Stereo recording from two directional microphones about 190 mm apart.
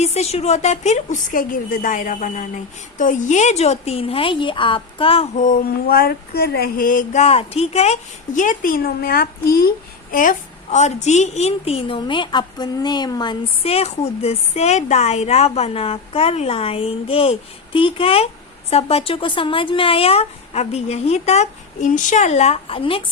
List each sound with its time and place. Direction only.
0.0 s a woman's voice: 35° left (ahead or behind)